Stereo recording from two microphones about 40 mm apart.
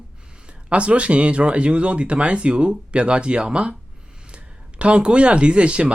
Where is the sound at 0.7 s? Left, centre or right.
Right.